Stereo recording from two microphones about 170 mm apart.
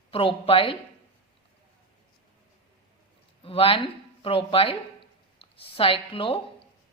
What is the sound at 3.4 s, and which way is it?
Speech, 30° left (ahead or behind).